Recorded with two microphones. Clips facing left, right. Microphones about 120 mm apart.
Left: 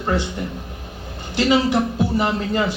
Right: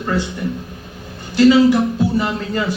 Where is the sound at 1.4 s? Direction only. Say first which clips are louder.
Right 6 dB; 20° left (ahead or behind).